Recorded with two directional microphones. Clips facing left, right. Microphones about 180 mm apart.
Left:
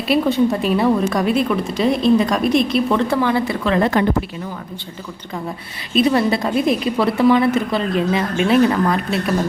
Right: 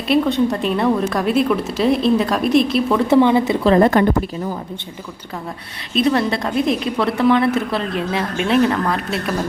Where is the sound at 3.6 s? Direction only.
35° right (ahead or behind).